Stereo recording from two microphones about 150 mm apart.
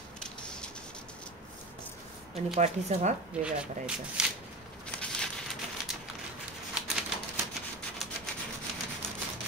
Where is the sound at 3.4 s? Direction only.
5° right (ahead or behind).